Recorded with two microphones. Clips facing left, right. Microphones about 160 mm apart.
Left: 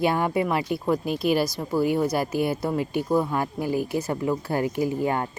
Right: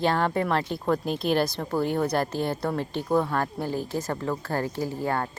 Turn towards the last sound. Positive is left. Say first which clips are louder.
# left 4 dB
turn(degrees=15)  # may be behind; listen again after turning